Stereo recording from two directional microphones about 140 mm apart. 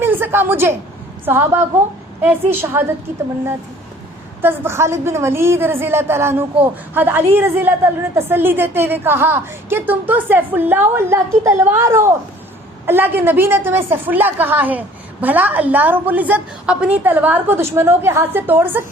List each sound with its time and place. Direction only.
0.0 s a sound: 15° right (ahead or behind)
1.2 s a woman's voice: 15° right (ahead or behind)
4.4 s a woman's voice: 15° right (ahead or behind)